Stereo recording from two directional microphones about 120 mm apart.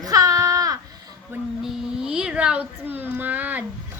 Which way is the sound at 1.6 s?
5° right (ahead or behind).